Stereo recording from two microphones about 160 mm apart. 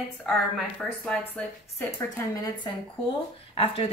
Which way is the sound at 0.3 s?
5° left (ahead or behind).